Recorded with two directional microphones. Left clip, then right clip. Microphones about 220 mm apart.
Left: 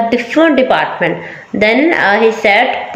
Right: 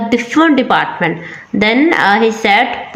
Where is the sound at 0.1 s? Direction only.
25° right (ahead or behind).